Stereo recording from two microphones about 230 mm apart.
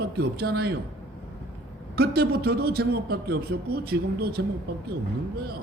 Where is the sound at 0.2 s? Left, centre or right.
Right.